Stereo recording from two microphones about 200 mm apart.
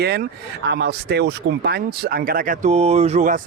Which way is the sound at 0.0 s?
55° right (ahead or behind).